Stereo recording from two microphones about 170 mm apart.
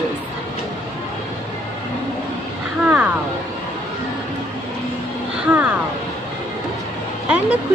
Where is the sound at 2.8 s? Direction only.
10° right (ahead or behind).